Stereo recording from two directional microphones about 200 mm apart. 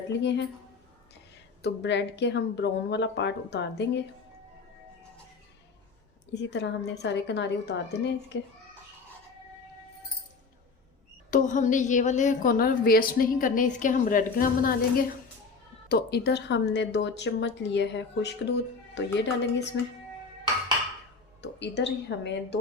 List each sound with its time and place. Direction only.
0.1 s a woman's voice: 60° left (ahead or behind)
1.6 s a woman's voice: 60° left (ahead or behind)
6.3 s a woman's voice: 60° left (ahead or behind)
11.3 s a woman's voice: 40° left (ahead or behind); by 19.6 s 60° left (ahead or behind)
21.4 s a woman's voice: 60° left (ahead or behind)